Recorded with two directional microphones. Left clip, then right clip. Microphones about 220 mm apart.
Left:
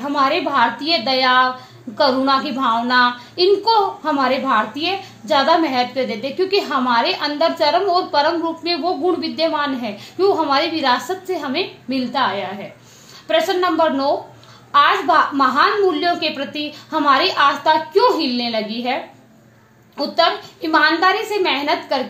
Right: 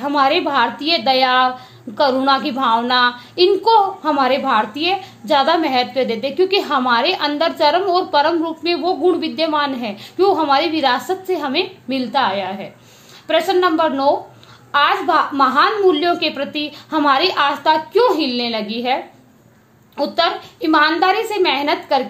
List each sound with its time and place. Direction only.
0.0 s a woman's voice: 45° right (ahead or behind)
20.0 s a woman's voice: 45° right (ahead or behind)